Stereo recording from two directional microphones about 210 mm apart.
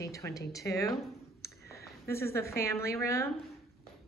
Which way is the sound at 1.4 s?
15° left (ahead or behind).